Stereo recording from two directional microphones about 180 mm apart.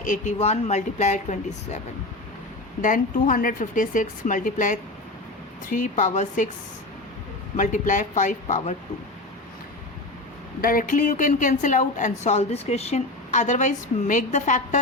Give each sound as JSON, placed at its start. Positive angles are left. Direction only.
{"t": 0.0, "sound": "speech", "side_deg": 45}
{"t": 2.8, "sound": "a woman's voice", "side_deg": 50}
{"t": 7.5, "sound": "a woman's voice", "side_deg": 45}
{"t": 10.6, "sound": "a woman's voice", "side_deg": 50}